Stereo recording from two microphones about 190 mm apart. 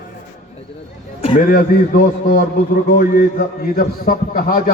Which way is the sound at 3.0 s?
50° left (ahead or behind).